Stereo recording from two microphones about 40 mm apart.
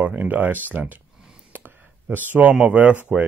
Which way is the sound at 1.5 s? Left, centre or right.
Right.